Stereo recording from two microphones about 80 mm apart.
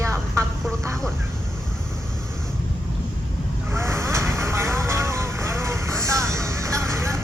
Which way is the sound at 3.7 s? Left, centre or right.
Right.